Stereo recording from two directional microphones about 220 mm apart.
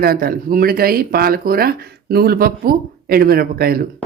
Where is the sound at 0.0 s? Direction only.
45° right (ahead or behind).